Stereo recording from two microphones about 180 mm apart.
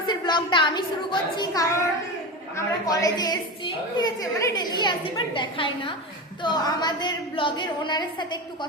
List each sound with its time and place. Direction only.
0.1 s a woman's voice: 25° left (ahead or behind)